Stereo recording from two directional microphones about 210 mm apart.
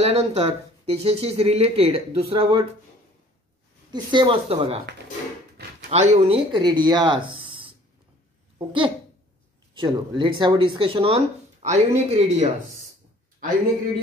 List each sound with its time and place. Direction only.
0.0 s speech: 30° right (ahead or behind)
3.9 s speech: 20° right (ahead or behind)
5.9 s speech: 30° right (ahead or behind)
7.4 s a sound: 25° right (ahead or behind)
8.5 s speech: 25° right (ahead or behind)